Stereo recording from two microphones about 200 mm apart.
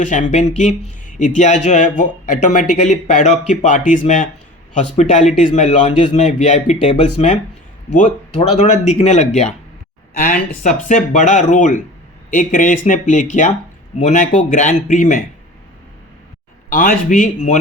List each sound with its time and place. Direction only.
0.0 s speech: 40° left (ahead or behind)
10.2 s speech: 45° left (ahead or behind)
16.6 s speech: 40° left (ahead or behind)